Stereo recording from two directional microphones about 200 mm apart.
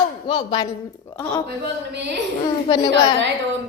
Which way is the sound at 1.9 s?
60° right (ahead or behind).